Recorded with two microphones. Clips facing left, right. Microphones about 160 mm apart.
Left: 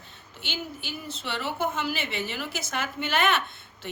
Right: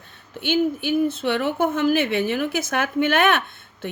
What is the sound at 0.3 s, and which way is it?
A woman's voice, 55° right (ahead or behind).